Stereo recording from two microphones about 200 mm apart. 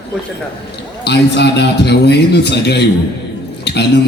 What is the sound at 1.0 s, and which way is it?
A man's voice, 55° left (ahead or behind).